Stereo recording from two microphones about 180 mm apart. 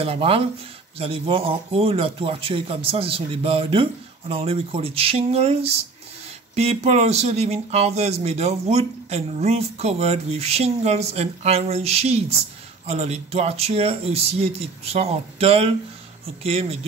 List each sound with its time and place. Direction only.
0.0 s speech: 30° right (ahead or behind)